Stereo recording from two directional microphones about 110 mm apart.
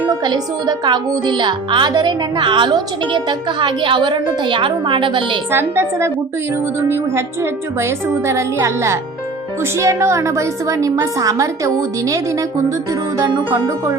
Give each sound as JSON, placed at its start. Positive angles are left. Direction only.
{"t": 0.1, "sound": "speech", "side_deg": -35}
{"t": 5.5, "sound": "a woman's voice", "side_deg": -20}